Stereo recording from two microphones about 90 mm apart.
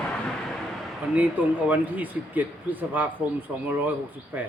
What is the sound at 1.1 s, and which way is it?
Speech, 20° right (ahead or behind).